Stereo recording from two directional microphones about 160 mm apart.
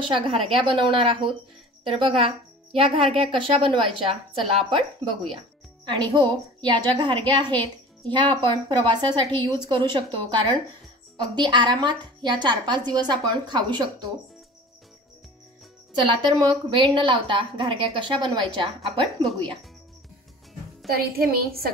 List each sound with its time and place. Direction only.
0.0 s a woman's voice: 35° right (ahead or behind)
15.9 s a woman's voice: 30° right (ahead or behind)
20.9 s a woman's voice: 70° right (ahead or behind)